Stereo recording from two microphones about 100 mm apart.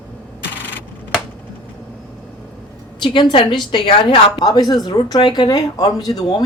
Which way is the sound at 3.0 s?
55° left (ahead or behind).